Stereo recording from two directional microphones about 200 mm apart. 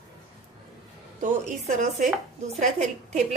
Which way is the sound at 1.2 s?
40° right (ahead or behind).